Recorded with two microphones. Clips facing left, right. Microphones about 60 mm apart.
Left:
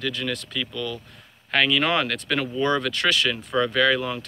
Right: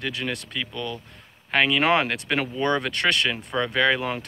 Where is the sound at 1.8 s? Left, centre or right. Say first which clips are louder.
Right 2 dB; right.